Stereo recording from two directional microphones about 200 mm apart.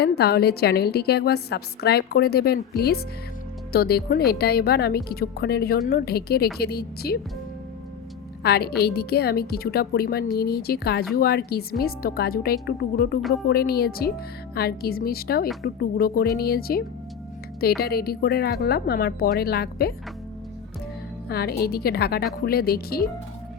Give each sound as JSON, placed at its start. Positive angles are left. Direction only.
{"t": 0.0, "sound": "a woman's voice", "side_deg": 55}
{"t": 8.4, "sound": "a woman's voice", "side_deg": 50}
{"t": 21.2, "sound": "a woman's voice", "side_deg": 50}